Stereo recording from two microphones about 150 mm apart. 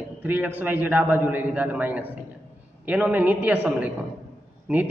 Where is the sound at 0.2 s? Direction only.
10° right (ahead or behind).